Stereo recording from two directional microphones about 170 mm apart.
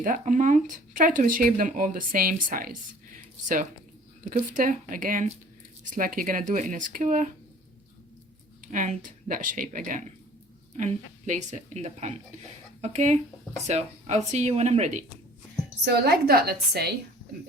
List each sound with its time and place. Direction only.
0.0 s speech: 50° right (ahead or behind)
4.3 s speech: 50° right (ahead or behind)
8.6 s speech: 50° right (ahead or behind)
15.8 s a woman's voice: 70° right (ahead or behind)